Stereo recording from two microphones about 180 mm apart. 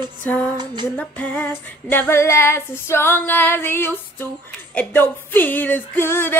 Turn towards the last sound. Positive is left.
turn(degrees=10)  # may be behind; listen again after turning